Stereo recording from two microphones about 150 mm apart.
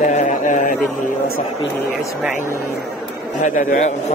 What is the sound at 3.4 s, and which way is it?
Speech, 60° left (ahead or behind).